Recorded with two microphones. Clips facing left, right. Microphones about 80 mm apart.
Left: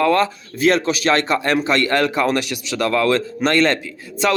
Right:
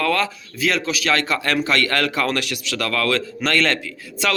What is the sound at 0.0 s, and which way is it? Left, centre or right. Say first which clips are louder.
Speech: left 5 dB; left.